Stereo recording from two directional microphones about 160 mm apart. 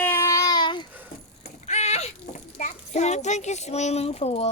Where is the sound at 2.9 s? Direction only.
45° left (ahead or behind).